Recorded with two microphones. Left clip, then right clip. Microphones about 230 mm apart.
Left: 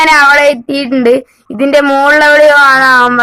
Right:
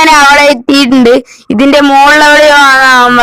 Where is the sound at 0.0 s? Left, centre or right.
Right.